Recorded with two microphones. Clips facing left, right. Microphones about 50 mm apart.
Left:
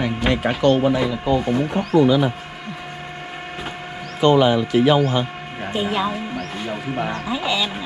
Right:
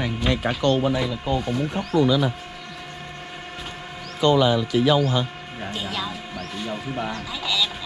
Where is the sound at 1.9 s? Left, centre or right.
Left.